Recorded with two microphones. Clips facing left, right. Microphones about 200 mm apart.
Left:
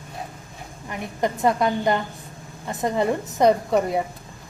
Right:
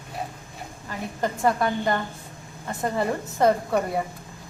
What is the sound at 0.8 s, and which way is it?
A woman's voice, 20° left (ahead or behind).